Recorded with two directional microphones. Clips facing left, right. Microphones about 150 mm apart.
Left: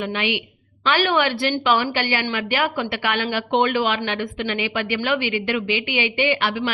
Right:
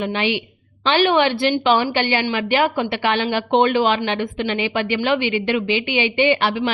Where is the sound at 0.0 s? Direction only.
30° right (ahead or behind).